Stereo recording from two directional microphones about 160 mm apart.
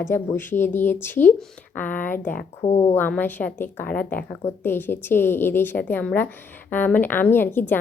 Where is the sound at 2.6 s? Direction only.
45° left (ahead or behind).